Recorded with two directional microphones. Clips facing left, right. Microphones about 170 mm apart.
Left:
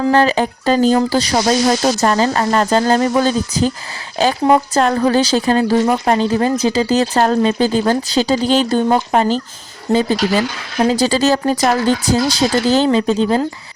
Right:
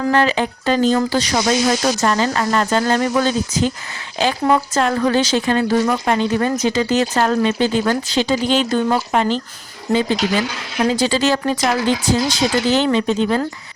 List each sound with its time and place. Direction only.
0.0 s speech: 35° left (ahead or behind)